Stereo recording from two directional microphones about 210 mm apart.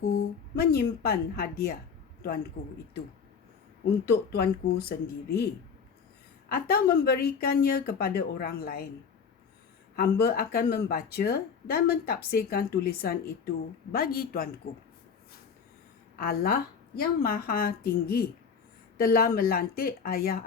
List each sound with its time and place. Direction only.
0.0 s speech: 45° left (ahead or behind)
4.1 s speech: 50° left (ahead or behind)
6.5 s speech: 45° left (ahead or behind)
9.9 s speech: 45° left (ahead or behind)
16.1 s speech: 45° left (ahead or behind)